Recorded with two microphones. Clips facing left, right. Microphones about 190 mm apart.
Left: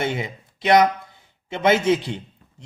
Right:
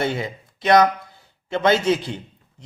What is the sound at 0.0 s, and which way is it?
A man's voice, 20° left (ahead or behind).